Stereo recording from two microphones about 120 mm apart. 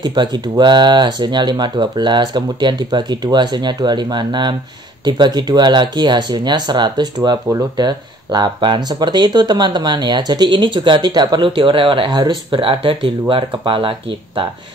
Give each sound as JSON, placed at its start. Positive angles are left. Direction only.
{"t": 0.0, "sound": "speech", "side_deg": -40}